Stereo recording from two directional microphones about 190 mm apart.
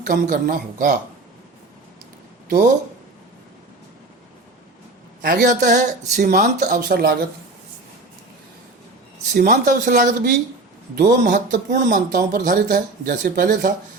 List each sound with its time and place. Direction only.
0.0 s speech: 45° right (ahead or behind)
5.2 s speech: 50° right (ahead or behind)
6.7 s speech: 55° right (ahead or behind)
9.3 s speech: 45° right (ahead or behind)
11.7 s speech: 55° right (ahead or behind)